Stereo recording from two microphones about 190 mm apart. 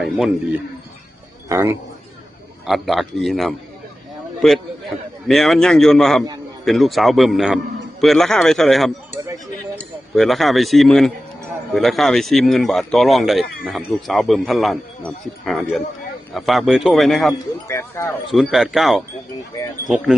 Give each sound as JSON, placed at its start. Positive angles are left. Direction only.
{"t": 1.5, "sound": "a man's voice", "side_deg": -15}
{"t": 2.6, "sound": "speech", "side_deg": 0}
{"t": 10.2, "sound": "speech", "side_deg": 0}
{"t": 17.7, "sound": "speech", "side_deg": 15}
{"t": 18.3, "sound": "speech", "side_deg": 0}
{"t": 19.5, "sound": "speech", "side_deg": 20}